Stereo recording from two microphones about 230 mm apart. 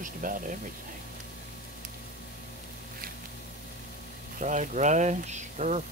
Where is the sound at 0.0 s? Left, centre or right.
Right.